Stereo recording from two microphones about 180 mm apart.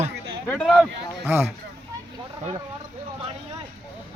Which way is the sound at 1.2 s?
15° right (ahead or behind).